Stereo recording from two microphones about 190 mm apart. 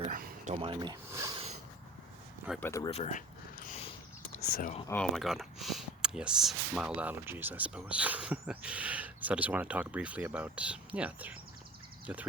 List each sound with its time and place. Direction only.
0.1 s a sound: 45° right (ahead or behind)
0.5 s speech: 25° right (ahead or behind)
2.6 s speech: 10° left (ahead or behind)
2.9 s a sound: 40° left (ahead or behind)
4.4 s speech: 50° left (ahead or behind)
4.9 s speech: 5° left (ahead or behind)